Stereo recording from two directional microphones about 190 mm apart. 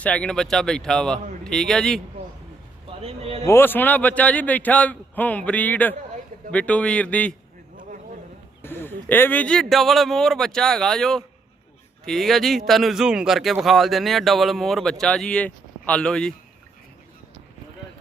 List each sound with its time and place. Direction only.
0.0 s a man's voice: 5° left (ahead or behind)
3.0 s a man's voice: 30° right (ahead or behind)
3.4 s a man's voice: 15° left (ahead or behind)
8.6 s a man's voice: 10° left (ahead or behind)